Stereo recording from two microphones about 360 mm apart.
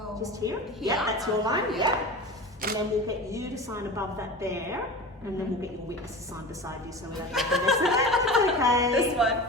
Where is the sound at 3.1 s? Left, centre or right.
Centre.